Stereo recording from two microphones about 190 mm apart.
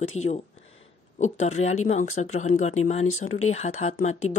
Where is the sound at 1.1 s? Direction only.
40° left (ahead or behind).